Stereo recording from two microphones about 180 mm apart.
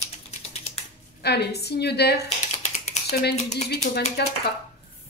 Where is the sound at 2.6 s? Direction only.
40° left (ahead or behind).